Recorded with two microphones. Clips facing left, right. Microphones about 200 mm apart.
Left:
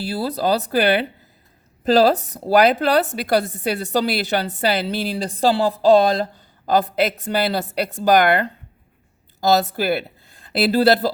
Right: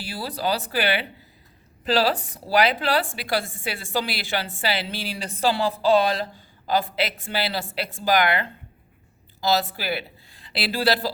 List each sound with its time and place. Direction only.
0.0 s a woman's voice: 40° left (ahead or behind)